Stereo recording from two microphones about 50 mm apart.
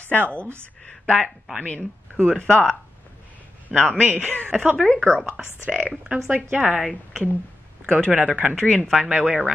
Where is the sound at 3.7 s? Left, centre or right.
Right.